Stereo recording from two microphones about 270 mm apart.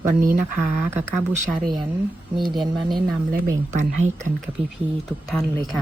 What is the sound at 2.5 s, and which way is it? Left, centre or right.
Speech, centre.